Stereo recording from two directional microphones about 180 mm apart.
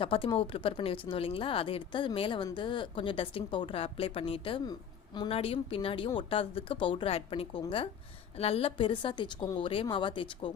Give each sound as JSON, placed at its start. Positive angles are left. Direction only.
{"t": 0.0, "sound": "a woman's voice", "side_deg": 30}